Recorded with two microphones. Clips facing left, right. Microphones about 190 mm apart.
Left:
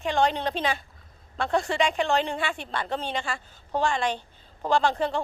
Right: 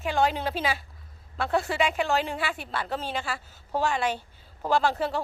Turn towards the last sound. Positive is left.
turn(degrees=-5)  # may be behind; listen again after turning